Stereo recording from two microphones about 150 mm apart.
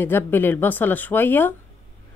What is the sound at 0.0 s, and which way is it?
Speech, 15° left (ahead or behind).